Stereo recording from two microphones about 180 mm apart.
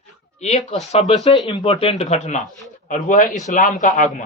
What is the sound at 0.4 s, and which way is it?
Speech, 40° left (ahead or behind).